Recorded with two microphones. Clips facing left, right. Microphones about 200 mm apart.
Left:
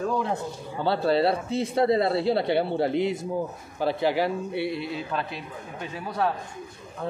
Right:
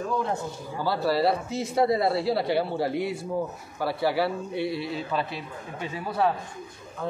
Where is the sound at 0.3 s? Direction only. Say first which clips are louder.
Even; 25° left (ahead or behind).